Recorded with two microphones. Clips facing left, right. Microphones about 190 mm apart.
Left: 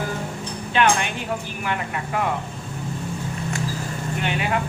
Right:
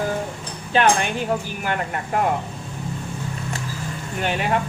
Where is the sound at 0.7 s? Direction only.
40° right (ahead or behind).